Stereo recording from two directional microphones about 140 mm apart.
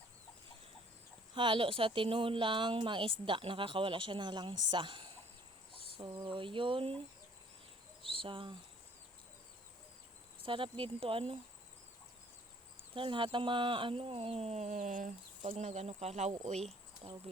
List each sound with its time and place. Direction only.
1.3 s speech: 35° right (ahead or behind)
8.0 s a sound: 40° right (ahead or behind)
10.4 s speech: 40° right (ahead or behind)
12.9 s speech: 35° right (ahead or behind); by 15.4 s 65° right (ahead or behind)
15.4 s speech: 50° right (ahead or behind)